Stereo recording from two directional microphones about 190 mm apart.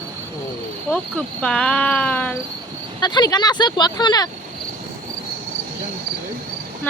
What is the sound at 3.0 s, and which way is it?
Speech, 25° left (ahead or behind).